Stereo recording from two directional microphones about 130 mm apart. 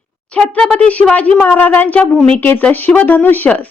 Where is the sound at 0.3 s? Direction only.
5° left (ahead or behind).